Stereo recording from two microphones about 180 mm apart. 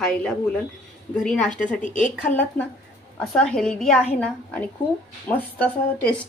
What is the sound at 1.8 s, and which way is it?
Speech, 45° left (ahead or behind).